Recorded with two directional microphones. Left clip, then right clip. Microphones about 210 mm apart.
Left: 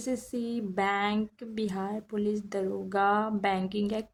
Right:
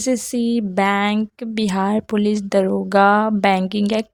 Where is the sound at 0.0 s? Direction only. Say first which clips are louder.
Right 13 dB; 40° right (ahead or behind).